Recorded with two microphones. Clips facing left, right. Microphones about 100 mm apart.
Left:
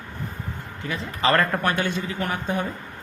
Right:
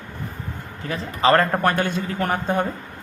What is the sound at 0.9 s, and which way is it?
Speech, 35° right (ahead or behind).